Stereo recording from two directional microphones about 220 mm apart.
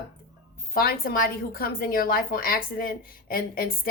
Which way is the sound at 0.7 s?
40° left (ahead or behind).